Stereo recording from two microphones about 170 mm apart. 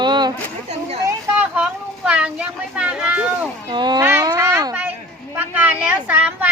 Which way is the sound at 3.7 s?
25° right (ahead or behind).